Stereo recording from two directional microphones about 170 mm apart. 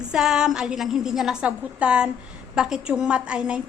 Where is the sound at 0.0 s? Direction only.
5° right (ahead or behind).